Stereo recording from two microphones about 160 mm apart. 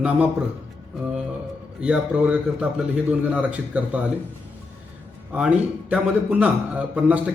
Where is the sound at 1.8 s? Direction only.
5° right (ahead or behind).